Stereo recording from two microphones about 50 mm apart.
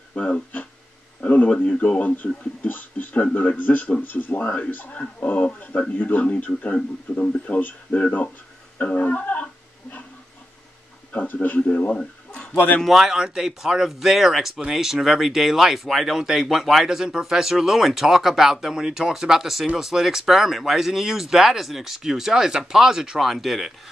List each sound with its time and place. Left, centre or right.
0.2 s a man's voice: left
8.7 s music: left
11.1 s a man's voice: left
12.8 s speech: centre